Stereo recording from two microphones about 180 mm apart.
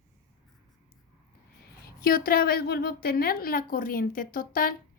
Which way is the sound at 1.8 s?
55° left (ahead or behind).